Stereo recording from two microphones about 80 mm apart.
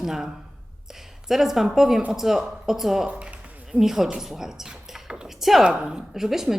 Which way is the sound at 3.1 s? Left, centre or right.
Centre.